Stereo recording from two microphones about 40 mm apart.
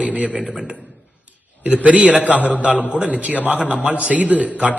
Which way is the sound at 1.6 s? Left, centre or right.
Right.